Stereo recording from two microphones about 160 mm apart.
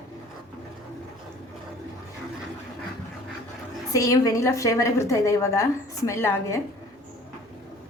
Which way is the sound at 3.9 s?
20° left (ahead or behind).